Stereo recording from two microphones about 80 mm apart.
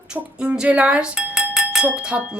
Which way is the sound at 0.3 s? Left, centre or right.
Centre.